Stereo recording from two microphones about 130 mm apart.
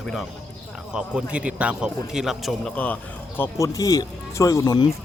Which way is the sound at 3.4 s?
25° left (ahead or behind).